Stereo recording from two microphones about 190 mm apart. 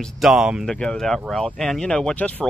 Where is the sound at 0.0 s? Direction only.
Centre (ahead or behind).